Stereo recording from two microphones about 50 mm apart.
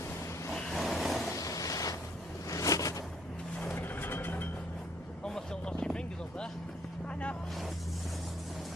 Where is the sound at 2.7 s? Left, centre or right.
Left.